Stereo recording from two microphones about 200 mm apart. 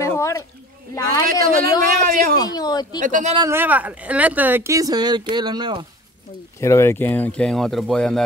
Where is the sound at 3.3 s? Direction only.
15° right (ahead or behind).